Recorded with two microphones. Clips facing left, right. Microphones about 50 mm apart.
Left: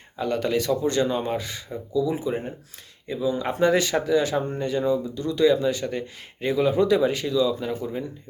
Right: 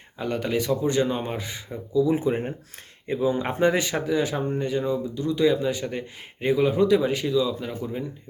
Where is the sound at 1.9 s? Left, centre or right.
Right.